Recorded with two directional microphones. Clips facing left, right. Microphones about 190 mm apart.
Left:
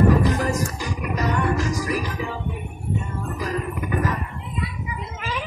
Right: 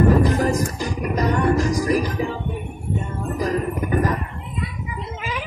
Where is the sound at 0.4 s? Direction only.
40° right (ahead or behind).